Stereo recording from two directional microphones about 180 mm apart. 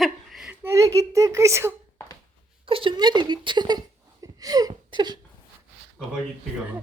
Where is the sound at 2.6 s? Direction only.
30° right (ahead or behind).